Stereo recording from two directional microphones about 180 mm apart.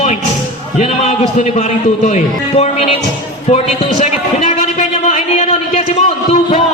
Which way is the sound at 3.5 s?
40° left (ahead or behind).